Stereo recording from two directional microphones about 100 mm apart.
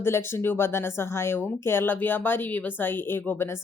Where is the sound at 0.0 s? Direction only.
25° left (ahead or behind).